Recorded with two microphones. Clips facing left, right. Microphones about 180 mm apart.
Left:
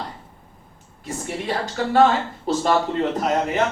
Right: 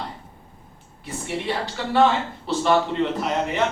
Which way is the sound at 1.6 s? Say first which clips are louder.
Left 3 dB; 45° left (ahead or behind).